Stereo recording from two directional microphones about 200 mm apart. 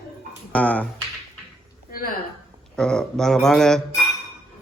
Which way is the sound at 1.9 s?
45° left (ahead or behind).